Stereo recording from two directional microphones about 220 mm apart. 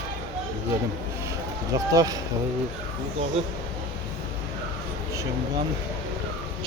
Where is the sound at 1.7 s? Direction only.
15° right (ahead or behind).